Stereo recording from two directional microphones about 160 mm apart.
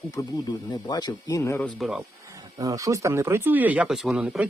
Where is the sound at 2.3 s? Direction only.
20° right (ahead or behind).